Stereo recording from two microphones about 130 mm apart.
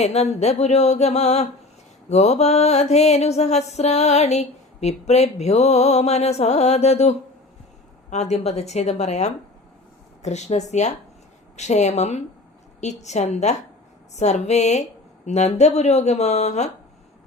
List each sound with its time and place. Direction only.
0.0 s mantra: 55° left (ahead or behind)